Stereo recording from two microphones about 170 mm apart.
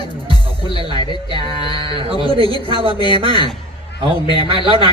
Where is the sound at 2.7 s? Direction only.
30° right (ahead or behind).